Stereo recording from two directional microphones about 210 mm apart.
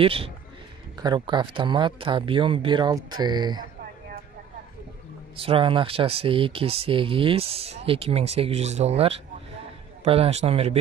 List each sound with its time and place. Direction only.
0.0 s speech: 25° right (ahead or behind)
5.4 s speech: 25° right (ahead or behind)